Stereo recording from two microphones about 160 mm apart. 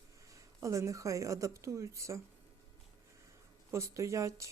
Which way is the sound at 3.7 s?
20° right (ahead or behind).